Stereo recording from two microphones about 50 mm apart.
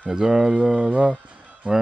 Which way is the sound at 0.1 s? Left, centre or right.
Right.